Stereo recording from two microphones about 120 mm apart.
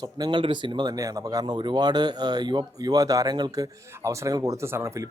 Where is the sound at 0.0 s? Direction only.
35° right (ahead or behind).